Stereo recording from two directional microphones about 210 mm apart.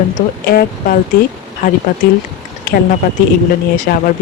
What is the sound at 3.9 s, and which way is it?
Speech, 45° left (ahead or behind).